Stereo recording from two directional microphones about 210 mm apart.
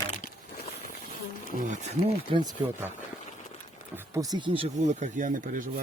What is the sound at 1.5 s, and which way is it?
Speech, 35° right (ahead or behind).